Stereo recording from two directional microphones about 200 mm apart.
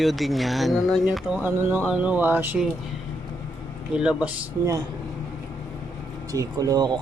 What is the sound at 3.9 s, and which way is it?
Speech, 5° right (ahead or behind).